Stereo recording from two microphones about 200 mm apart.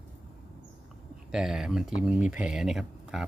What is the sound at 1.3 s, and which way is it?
Speech, centre (ahead or behind).